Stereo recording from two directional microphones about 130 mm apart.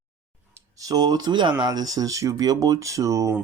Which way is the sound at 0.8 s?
30° right (ahead or behind).